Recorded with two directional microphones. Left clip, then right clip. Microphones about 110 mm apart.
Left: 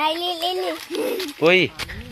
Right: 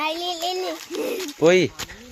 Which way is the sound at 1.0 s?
20° right (ahead or behind).